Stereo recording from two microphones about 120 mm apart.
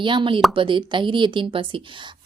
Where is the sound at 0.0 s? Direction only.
40° right (ahead or behind).